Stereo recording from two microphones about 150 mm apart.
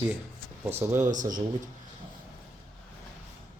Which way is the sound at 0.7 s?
15° right (ahead or behind).